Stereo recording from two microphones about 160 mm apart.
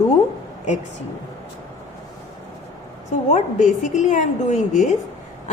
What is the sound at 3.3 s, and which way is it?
A woman's voice, 50° left (ahead or behind).